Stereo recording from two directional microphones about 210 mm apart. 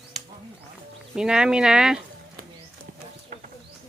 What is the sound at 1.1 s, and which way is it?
Speech, 5° right (ahead or behind).